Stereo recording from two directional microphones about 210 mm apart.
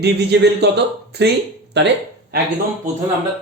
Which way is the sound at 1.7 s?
55° right (ahead or behind).